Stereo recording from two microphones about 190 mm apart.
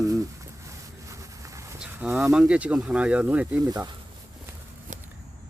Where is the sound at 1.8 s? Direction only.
5° right (ahead or behind).